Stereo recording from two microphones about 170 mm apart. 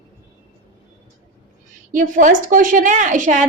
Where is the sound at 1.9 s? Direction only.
50° right (ahead or behind).